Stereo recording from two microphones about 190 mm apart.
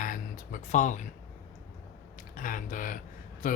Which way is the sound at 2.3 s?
45° left (ahead or behind).